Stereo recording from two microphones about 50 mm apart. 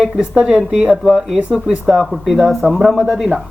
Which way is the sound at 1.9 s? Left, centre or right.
Centre.